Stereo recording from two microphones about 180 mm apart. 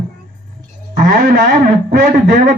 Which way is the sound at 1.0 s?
45° right (ahead or behind).